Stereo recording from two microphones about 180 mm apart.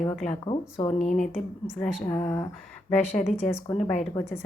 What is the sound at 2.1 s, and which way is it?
Speech, 15° left (ahead or behind).